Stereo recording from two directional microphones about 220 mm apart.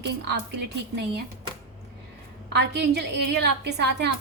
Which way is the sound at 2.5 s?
50° right (ahead or behind).